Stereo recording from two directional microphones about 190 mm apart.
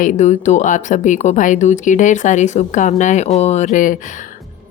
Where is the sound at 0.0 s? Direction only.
40° left (ahead or behind).